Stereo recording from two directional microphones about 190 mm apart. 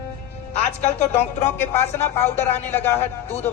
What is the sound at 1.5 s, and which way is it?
A man's voice, 10° left (ahead or behind).